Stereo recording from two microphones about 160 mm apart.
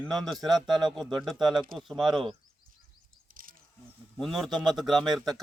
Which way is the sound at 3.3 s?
60° right (ahead or behind).